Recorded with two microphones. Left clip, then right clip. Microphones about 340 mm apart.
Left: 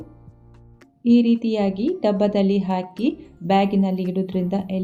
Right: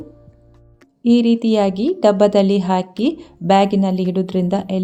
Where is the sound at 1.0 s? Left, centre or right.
Right.